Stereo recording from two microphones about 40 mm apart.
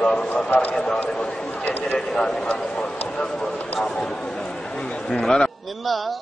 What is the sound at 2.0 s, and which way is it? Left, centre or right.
A man's voice, centre.